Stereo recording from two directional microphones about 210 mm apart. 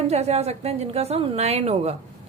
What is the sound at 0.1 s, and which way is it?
A woman's voice, 30° right (ahead or behind).